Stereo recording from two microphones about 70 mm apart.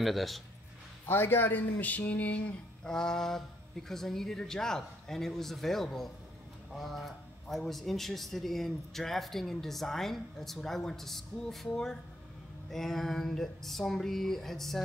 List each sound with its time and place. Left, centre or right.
0.0 s a man's voice: centre
1.0 s a man's voice: left; by 14.8 s centre